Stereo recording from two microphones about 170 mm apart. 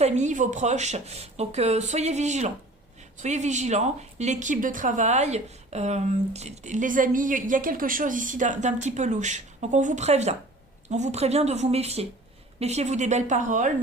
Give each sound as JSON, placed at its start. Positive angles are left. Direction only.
{"t": 0.0, "sound": "a woman's voice", "side_deg": -45}